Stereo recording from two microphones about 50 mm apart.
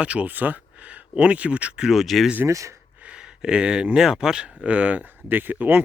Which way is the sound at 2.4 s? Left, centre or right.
Right.